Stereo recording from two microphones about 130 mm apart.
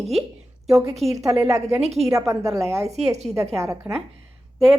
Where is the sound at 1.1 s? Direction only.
25° right (ahead or behind).